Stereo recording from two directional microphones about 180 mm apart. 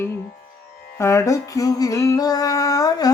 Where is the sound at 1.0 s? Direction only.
15° left (ahead or behind).